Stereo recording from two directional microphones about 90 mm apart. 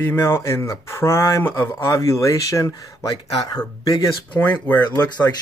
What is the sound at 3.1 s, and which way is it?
Speech, 50° left (ahead or behind).